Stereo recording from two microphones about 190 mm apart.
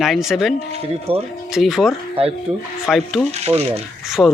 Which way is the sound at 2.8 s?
Centre (ahead or behind).